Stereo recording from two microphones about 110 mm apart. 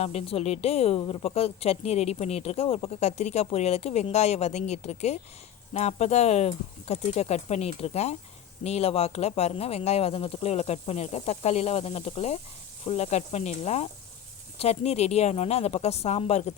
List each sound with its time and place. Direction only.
0.0 s a woman's voice: 75° left (ahead or behind)